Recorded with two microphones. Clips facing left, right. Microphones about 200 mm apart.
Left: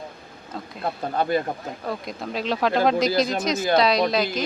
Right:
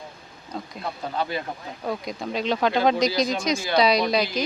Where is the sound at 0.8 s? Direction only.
50° left (ahead or behind).